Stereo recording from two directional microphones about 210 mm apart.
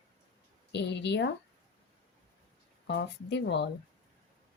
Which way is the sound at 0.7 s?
55° left (ahead or behind).